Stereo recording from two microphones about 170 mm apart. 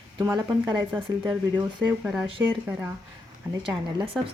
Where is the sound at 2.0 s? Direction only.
5° right (ahead or behind).